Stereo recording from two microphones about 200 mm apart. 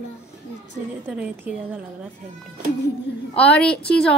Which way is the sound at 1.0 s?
10° right (ahead or behind).